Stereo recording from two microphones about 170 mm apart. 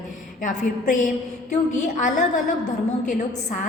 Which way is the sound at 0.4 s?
50° left (ahead or behind).